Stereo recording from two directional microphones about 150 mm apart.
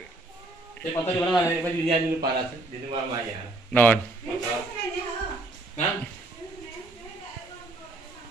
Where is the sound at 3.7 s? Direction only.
10° left (ahead or behind).